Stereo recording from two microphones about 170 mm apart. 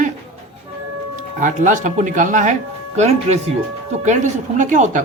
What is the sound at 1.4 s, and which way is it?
Speech, 45° right (ahead or behind).